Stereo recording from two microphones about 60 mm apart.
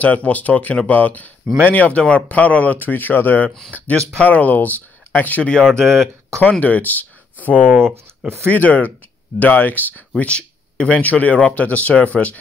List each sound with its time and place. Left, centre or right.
0.0 s speech: left
3.9 s speech: right
4.2 s speech: left
5.4 s speech: centre
6.6 s speech: left